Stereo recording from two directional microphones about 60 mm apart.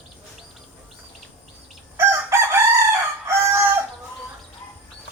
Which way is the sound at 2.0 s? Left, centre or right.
Right.